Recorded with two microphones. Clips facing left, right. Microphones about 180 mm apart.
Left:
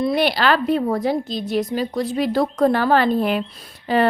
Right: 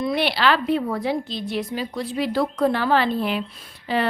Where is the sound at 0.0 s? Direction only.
40° left (ahead or behind).